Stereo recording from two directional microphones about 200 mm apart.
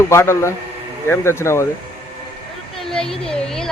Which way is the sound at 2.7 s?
Centre (ahead or behind).